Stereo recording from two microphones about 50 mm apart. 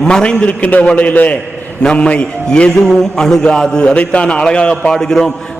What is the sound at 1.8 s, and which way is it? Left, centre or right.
Speech, centre.